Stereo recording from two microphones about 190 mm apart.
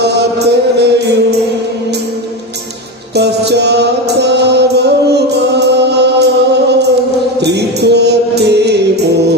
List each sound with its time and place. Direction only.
0.0 s music: 60° right (ahead or behind)
3.2 s music: 60° right (ahead or behind)